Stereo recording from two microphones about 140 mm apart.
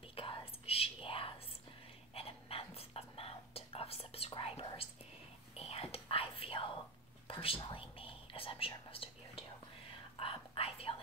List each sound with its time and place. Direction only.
0.1 s whispering: 40° left (ahead or behind)